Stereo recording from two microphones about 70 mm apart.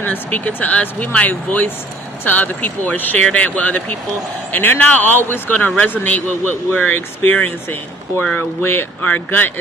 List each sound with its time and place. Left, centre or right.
0.0 s speech: left